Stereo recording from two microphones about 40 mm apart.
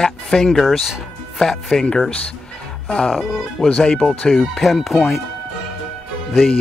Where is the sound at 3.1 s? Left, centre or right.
Centre.